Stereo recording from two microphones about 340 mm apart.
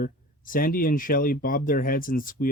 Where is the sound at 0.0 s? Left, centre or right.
Left.